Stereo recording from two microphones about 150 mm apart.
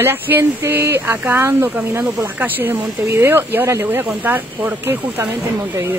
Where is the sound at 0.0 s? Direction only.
15° right (ahead or behind).